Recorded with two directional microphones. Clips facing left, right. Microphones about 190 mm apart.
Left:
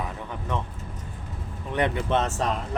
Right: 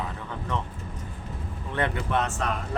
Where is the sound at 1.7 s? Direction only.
20° left (ahead or behind).